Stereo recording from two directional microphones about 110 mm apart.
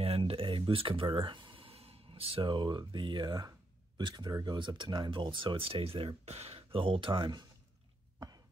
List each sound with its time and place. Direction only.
0.0 s speech: 60° right (ahead or behind); by 7.4 s 45° right (ahead or behind)